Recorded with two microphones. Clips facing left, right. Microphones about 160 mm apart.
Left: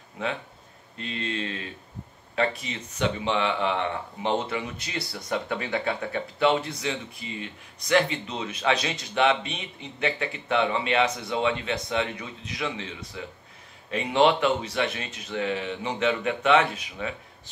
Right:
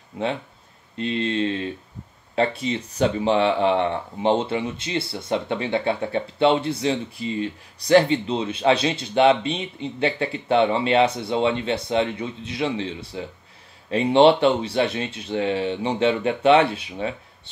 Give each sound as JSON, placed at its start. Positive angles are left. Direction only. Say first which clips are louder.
{"t": 0.9, "sound": "speech", "louder": "right 8 dB", "side_deg": -30}